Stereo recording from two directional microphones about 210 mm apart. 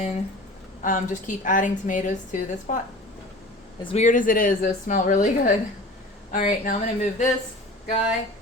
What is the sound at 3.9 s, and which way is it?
A woman's voice, 35° left (ahead or behind).